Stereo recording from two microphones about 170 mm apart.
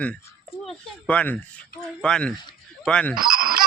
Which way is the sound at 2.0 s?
5° left (ahead or behind).